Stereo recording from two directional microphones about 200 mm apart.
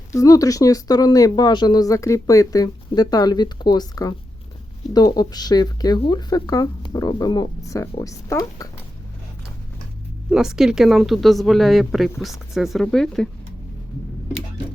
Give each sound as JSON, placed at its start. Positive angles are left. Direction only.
{"t": 0.1, "sound": "speech", "side_deg": 15}
{"t": 10.2, "sound": "speech", "side_deg": -5}